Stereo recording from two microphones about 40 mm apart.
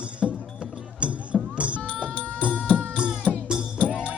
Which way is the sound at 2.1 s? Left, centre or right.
Left.